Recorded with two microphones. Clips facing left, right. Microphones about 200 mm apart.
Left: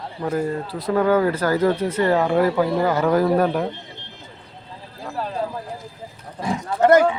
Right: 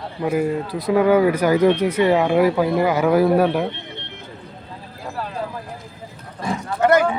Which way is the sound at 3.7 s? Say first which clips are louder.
Right 3 dB; 70° right (ahead or behind).